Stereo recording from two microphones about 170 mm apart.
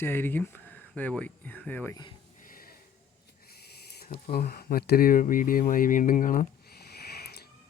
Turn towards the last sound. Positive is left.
turn(degrees=70)  # may be behind; listen again after turning